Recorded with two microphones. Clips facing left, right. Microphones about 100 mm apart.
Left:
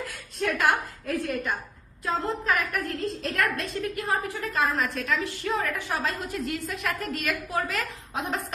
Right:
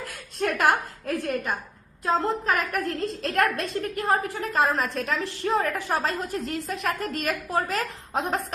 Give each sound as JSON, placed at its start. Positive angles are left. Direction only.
{"t": 0.1, "sound": "a woman's voice", "side_deg": -50}
{"t": 2.1, "sound": "a woman's voice", "side_deg": -35}